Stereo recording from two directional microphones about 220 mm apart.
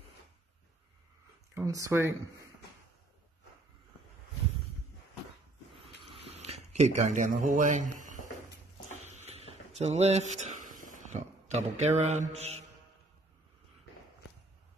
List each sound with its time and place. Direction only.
1.5 s speech: 15° right (ahead or behind)
6.3 s speech: 30° right (ahead or behind)
9.0 s a sound: 30° right (ahead or behind)
12.1 s mantra: 30° right (ahead or behind)